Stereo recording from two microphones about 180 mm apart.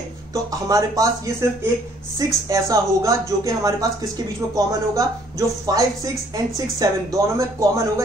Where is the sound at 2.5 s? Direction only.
15° right (ahead or behind).